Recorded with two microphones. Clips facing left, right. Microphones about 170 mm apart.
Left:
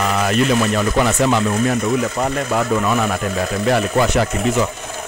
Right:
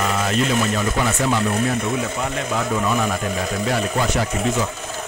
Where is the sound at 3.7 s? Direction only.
70° left (ahead or behind).